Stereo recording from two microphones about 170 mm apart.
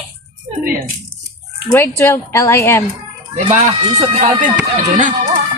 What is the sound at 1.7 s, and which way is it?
A woman's voice, 15° left (ahead or behind).